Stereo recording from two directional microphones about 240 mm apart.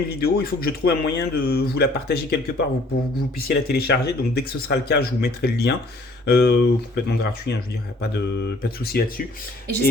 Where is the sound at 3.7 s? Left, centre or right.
Left.